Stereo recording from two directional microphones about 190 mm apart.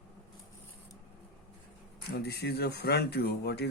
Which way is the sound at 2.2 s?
60° left (ahead or behind).